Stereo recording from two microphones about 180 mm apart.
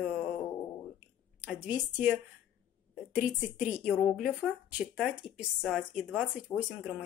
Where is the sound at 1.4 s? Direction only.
10° right (ahead or behind).